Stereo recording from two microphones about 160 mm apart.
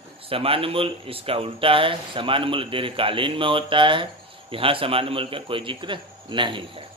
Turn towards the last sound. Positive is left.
turn(degrees=-30)  # may be behind; listen again after turning